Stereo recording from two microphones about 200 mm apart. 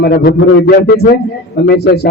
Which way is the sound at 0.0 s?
50° left (ahead or behind).